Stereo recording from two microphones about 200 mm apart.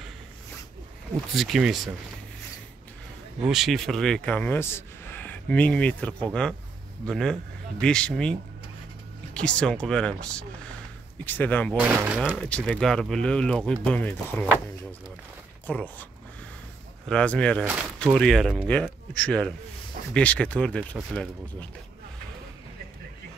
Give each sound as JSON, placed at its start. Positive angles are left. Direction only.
{"t": 1.3, "sound": "speech", "side_deg": 0}
{"t": 3.4, "sound": "a man's voice", "side_deg": 0}
{"t": 11.8, "sound": "speech", "side_deg": -5}
{"t": 12.4, "sound": "a man's voice", "side_deg": 5}
{"t": 17.1, "sound": "a man's voice", "side_deg": 5}